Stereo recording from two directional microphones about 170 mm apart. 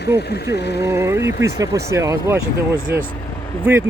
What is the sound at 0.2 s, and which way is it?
Speech, 75° left (ahead or behind).